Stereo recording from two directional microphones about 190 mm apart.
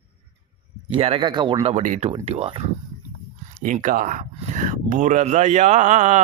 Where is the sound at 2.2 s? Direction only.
30° right (ahead or behind).